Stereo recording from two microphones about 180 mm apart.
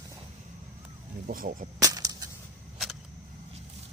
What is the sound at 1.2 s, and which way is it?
Speech, 50° right (ahead or behind).